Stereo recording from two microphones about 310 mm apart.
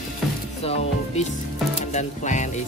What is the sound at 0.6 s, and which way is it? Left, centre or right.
Speech, left.